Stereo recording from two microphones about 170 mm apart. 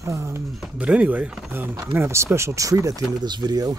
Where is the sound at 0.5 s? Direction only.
5° right (ahead or behind); by 3.8 s 20° right (ahead or behind).